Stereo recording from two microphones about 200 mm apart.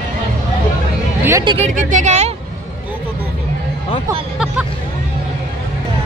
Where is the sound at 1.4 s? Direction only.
30° right (ahead or behind).